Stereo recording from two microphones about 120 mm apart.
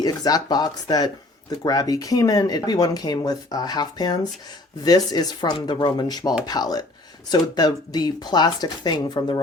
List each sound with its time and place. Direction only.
0.0 s speech: 30° left (ahead or behind)